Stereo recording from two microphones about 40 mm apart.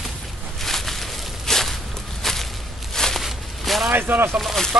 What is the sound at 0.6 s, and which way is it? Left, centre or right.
Walk, centre.